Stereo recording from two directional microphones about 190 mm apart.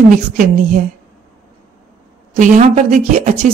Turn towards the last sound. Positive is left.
turn(degrees=-40)  # may be behind; listen again after turning